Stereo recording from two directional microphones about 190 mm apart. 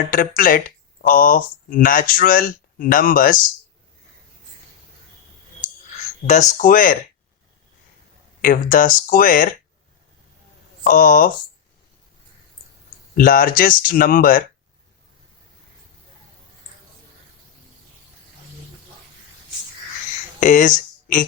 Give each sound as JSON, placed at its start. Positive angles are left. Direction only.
{"t": 0.1, "sound": "speech", "side_deg": 45}
{"t": 6.6, "sound": "speech", "side_deg": 45}
{"t": 8.4, "sound": "speech", "side_deg": 45}
{"t": 10.8, "sound": "speech", "side_deg": 50}
{"t": 13.1, "sound": "speech", "side_deg": 45}
{"t": 20.4, "sound": "speech", "side_deg": 40}